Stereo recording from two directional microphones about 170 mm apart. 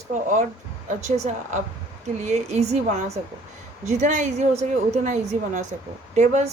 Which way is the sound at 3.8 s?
45° right (ahead or behind).